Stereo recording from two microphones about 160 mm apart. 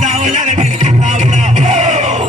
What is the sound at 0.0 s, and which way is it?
Music, 50° right (ahead or behind).